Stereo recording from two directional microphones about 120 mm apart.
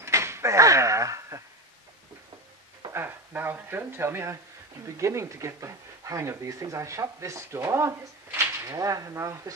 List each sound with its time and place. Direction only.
0.0 s door: 20° right (ahead or behind)
2.9 s speech: 20° right (ahead or behind)